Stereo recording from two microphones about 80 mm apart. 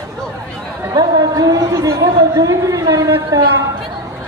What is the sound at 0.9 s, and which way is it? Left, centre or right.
A man's voice, right.